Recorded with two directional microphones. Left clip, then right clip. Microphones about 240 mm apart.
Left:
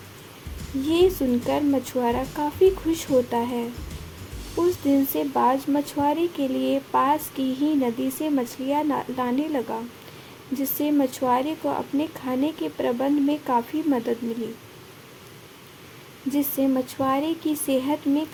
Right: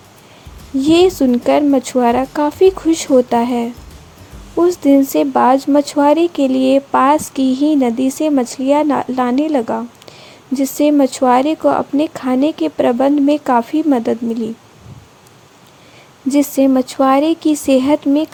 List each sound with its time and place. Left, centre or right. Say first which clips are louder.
0.8 s a woman's voice: right 9 dB; right
16.3 s speech: right 11 dB; right